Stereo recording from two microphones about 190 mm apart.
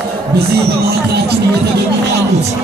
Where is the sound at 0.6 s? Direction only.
55° right (ahead or behind).